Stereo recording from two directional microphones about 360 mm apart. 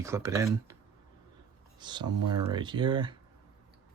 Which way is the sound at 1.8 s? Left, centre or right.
Centre.